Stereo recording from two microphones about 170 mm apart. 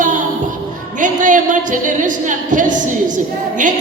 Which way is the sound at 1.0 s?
50° right (ahead or behind).